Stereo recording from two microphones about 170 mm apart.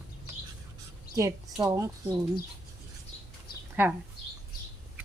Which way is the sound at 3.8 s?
10° right (ahead or behind).